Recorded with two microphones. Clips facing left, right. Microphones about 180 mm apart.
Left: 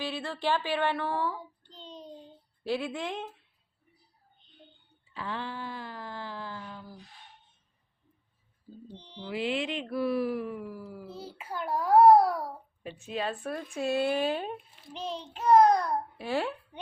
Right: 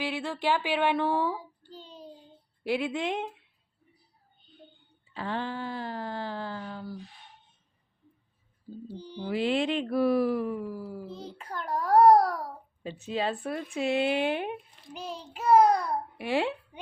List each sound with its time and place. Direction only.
0.0 s child singing: 10° right (ahead or behind)
2.6 s child singing: 15° right (ahead or behind)
5.1 s speech: 35° right (ahead or behind)
6.7 s a sound: 60° right (ahead or behind)
8.9 s speech: 5° right (ahead or behind)
9.1 s speech: 40° right (ahead or behind)
11.1 s a child's voice: 5° left (ahead or behind)
12.8 s speech: 30° right (ahead or behind)
14.9 s child singing: 10° right (ahead or behind)
16.3 s speech: 20° right (ahead or behind)